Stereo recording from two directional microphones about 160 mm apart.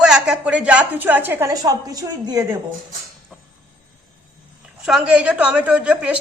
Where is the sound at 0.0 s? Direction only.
5° right (ahead or behind); by 2.6 s 20° right (ahead or behind).